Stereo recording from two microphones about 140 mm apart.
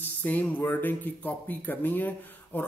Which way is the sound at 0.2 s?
10° left (ahead or behind).